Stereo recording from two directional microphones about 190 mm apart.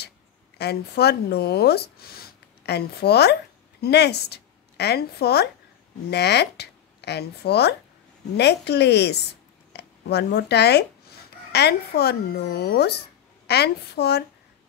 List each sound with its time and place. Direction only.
0.6 s a woman's voice: 60° left (ahead or behind)